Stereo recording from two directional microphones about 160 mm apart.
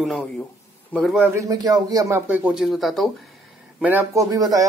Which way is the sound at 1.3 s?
20° right (ahead or behind).